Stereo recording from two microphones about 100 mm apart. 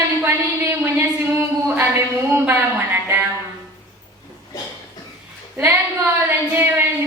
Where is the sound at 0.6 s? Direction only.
25° right (ahead or behind).